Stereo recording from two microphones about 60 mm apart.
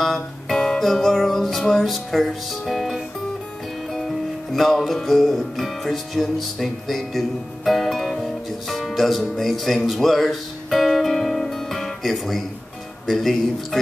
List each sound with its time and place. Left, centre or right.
0.0 s music: centre
1.8 s speech: centre
4.5 s music: centre
13.0 s speech: centre